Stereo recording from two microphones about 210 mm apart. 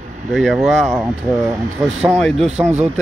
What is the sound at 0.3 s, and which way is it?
Speech, centre (ahead or behind).